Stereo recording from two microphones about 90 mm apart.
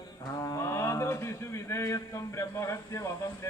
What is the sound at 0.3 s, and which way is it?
Speech, 40° left (ahead or behind).